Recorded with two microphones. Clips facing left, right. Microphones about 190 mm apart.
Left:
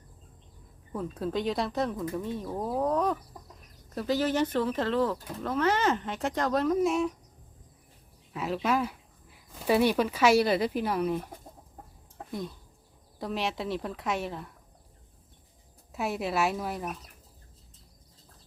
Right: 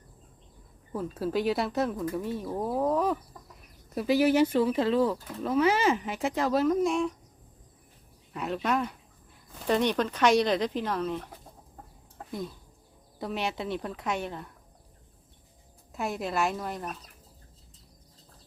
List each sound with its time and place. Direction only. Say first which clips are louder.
0.9 s speech: right 2 dB; 5° right (ahead or behind)
8.3 s speech: left 1 dB; centre (ahead or behind)
12.3 s speech: even; centre (ahead or behind)
15.9 s speech: left 1 dB; 5° left (ahead or behind)